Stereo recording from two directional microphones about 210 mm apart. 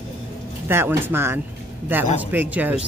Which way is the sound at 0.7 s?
10° right (ahead or behind).